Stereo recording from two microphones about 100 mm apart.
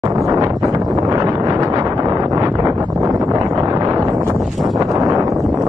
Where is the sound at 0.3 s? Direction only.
40° right (ahead or behind).